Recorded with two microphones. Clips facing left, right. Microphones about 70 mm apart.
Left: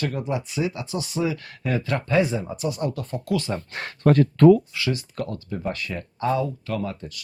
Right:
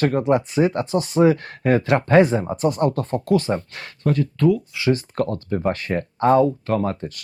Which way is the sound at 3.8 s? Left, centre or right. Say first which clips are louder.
Left 3 dB; left.